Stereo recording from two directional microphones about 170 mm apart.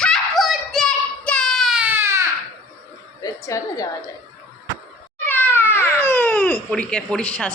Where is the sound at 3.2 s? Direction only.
20° left (ahead or behind).